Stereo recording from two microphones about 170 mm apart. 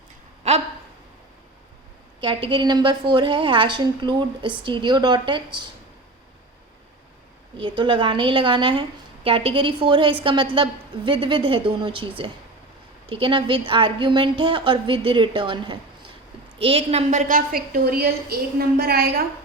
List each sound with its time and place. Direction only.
0.4 s a sound: 40° right (ahead or behind)
2.2 s a woman's voice: 30° right (ahead or behind)
7.6 s a woman's voice: 30° right (ahead or behind); by 19.2 s 65° right (ahead or behind)